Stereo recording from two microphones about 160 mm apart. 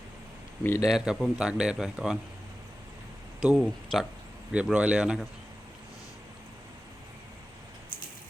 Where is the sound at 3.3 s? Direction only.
5° right (ahead or behind).